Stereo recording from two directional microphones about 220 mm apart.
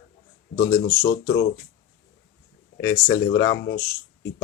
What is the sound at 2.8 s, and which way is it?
Speech, 15° left (ahead or behind).